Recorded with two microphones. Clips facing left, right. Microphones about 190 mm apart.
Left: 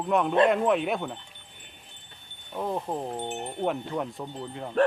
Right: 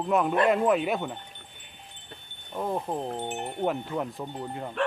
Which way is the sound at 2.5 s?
Centre (ahead or behind).